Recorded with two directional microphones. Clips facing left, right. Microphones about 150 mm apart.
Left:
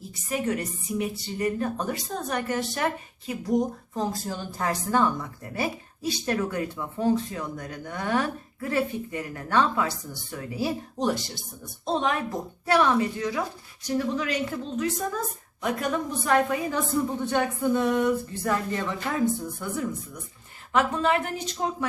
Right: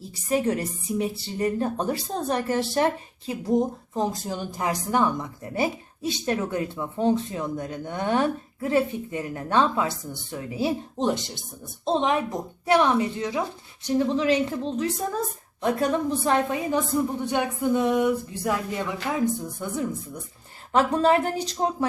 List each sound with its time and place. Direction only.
0.1 s a woman's voice: 30° right (ahead or behind)
20.7 s speech: 35° right (ahead or behind)